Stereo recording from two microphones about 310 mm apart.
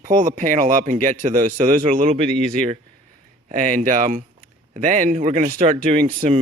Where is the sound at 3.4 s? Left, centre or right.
Right.